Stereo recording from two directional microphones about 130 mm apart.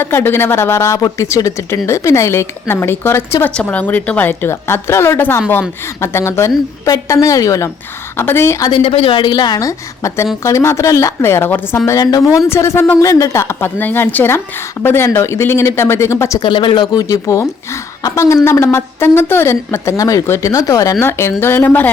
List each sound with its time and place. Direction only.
0.0 s a woman's voice: 15° left (ahead or behind)
8.7 s a woman's voice: 45° left (ahead or behind); by 11.8 s 15° left (ahead or behind)
11.9 s a woman's voice: 25° left (ahead or behind)
16.4 s a woman's voice: 40° left (ahead or behind); by 21.8 s 15° left (ahead or behind)